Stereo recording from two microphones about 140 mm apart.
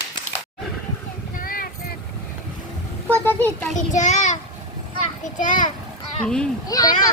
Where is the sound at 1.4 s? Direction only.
90° left.